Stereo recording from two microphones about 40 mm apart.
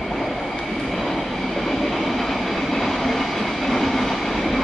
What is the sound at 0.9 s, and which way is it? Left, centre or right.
Train, centre.